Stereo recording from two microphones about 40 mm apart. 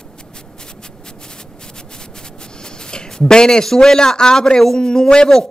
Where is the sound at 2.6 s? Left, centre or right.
Centre.